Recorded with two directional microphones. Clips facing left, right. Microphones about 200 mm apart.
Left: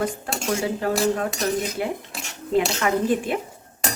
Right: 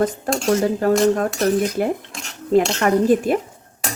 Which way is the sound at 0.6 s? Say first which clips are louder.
Right 6 dB; 45° right (ahead or behind).